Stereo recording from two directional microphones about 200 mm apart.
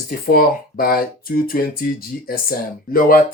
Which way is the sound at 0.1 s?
45° left (ahead or behind).